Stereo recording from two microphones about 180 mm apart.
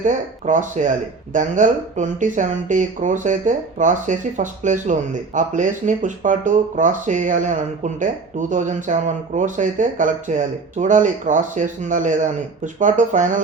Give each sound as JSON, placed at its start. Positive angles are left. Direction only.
{"t": 0.0, "sound": "speech", "side_deg": -45}